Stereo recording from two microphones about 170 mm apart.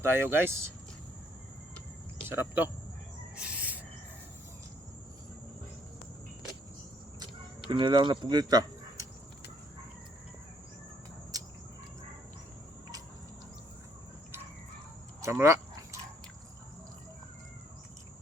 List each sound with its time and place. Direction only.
0.0 s speech: 15° right (ahead or behind)
2.3 s speech: 15° right (ahead or behind)
3.3 s a sound: 5° right (ahead or behind)
7.7 s speech: 25° right (ahead or behind)
15.2 s dog: 15° right (ahead or behind)